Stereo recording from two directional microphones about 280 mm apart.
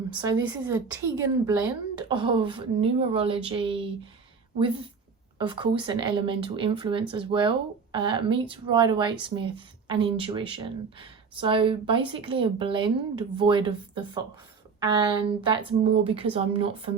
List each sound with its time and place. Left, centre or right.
0.1 s speech: centre
5.4 s speech: centre